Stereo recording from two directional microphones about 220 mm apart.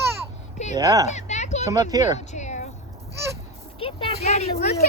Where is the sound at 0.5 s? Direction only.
30° left (ahead or behind).